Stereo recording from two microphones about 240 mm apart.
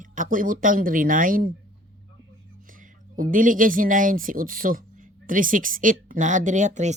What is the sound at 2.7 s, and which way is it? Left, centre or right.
Speech, right.